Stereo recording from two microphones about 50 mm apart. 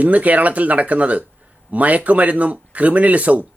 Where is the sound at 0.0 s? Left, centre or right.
Right.